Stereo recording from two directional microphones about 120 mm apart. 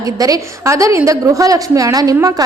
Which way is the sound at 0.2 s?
30° right (ahead or behind).